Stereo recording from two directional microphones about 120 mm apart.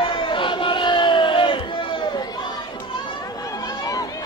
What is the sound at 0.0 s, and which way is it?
Crowd, 45° left (ahead or behind).